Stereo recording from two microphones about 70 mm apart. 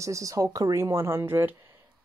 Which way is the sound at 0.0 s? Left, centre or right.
Right.